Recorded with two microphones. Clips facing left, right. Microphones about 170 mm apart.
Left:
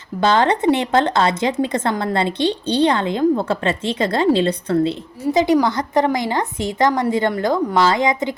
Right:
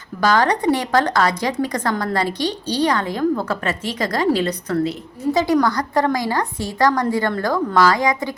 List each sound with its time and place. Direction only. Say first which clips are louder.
0.2 s speech: left 1 dB; 25° left (ahead or behind)